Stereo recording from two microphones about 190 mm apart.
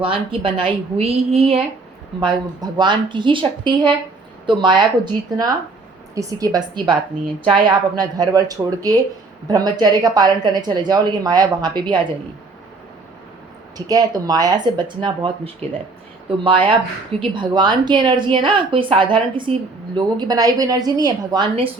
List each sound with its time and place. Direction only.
0.0 s a woman's voice: 30° right (ahead or behind)
13.7 s a woman's voice: 20° right (ahead or behind)